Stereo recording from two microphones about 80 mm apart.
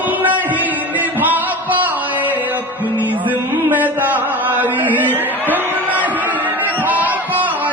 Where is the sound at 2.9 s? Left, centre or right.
Right.